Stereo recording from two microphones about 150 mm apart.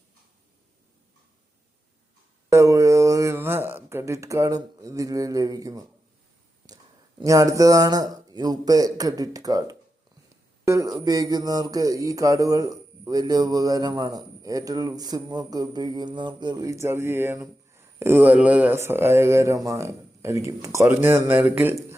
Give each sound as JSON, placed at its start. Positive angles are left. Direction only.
{"t": 2.5, "sound": "speech", "side_deg": -20}
{"t": 7.2, "sound": "speech", "side_deg": -20}